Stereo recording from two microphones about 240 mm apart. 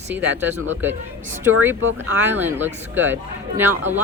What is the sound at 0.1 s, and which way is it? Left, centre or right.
Speech, centre.